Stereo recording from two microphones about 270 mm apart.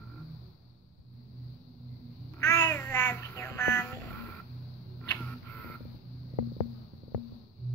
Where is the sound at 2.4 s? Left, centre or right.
Centre.